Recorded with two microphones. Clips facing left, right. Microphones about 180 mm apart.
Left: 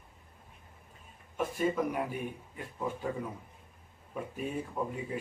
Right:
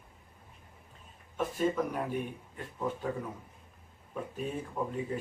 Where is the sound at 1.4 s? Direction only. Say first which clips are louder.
Even; 10° left (ahead or behind).